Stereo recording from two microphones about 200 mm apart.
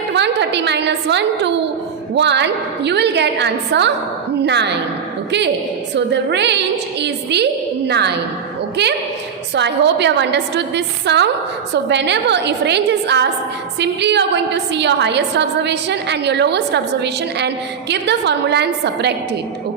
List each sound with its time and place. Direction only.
0.1 s a sound: 60° right (ahead or behind)
2.1 s a woman's voice: 60° right (ahead or behind)
5.9 s a woman's voice: 60° right (ahead or behind)